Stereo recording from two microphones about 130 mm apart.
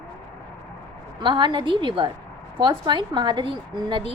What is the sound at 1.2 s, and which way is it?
A woman's voice, 35° right (ahead or behind).